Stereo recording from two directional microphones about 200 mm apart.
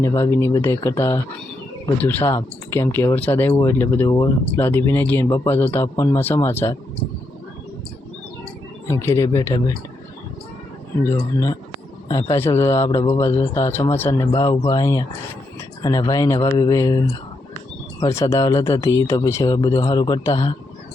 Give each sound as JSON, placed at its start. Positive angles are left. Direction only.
{"t": 0.0, "sound": "speech", "side_deg": 15}
{"t": 8.9, "sound": "speech", "side_deg": 15}
{"t": 11.0, "sound": "speech", "side_deg": 15}